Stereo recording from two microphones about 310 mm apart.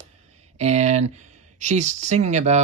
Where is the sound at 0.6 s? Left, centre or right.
Right.